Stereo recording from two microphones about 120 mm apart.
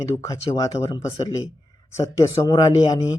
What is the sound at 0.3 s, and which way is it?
Speech, 30° left (ahead or behind).